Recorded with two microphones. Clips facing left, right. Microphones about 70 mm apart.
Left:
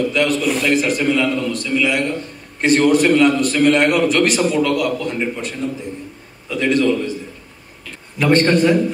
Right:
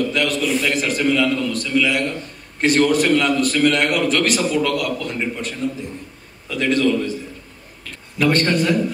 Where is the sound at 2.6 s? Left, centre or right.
Left.